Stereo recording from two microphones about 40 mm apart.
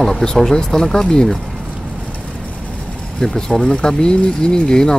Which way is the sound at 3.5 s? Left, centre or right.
Left.